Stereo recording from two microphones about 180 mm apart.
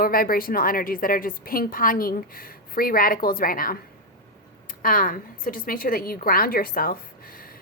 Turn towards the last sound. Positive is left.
turn(degrees=55)  # may be behind; listen again after turning